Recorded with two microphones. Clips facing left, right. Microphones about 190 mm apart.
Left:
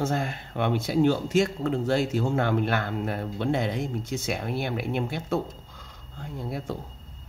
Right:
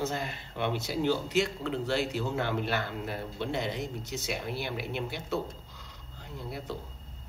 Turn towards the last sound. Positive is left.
turn(degrees=50)  # may be behind; listen again after turning